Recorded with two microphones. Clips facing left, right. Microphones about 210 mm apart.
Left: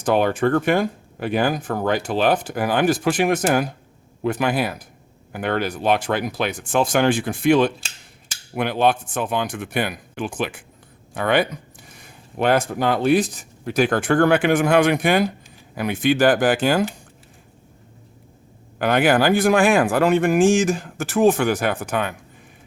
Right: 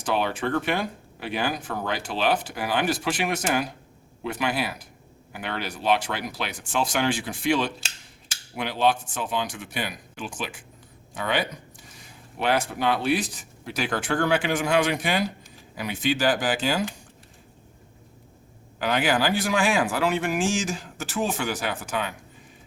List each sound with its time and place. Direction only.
0.0 s speech: 50° left (ahead or behind)
18.8 s speech: 55° left (ahead or behind)